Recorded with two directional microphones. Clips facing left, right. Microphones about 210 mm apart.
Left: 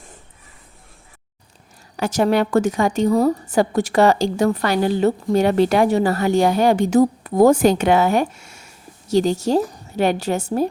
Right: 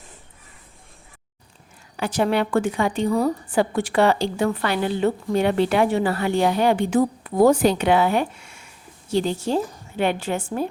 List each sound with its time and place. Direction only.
2.0 s a woman's voice: 45° left (ahead or behind)